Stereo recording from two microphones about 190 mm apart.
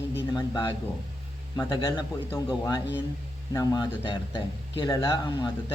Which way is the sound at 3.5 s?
20° left (ahead or behind).